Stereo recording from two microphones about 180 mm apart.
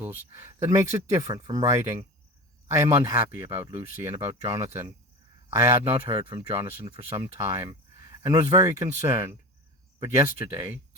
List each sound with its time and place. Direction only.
0.0 s speech: 15° right (ahead or behind)
6.1 s speech: 30° right (ahead or behind)
6.5 s speech: 15° right (ahead or behind)